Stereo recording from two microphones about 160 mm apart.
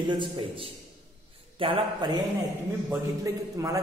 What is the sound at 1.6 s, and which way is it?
Mantra, 35° right (ahead or behind).